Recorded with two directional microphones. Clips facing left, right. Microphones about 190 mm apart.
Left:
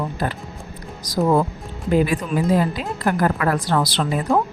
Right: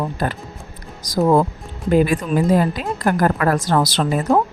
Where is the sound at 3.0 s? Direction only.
45° right (ahead or behind).